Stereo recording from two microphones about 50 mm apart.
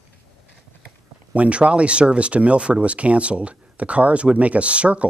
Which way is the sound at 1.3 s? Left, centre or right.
Right.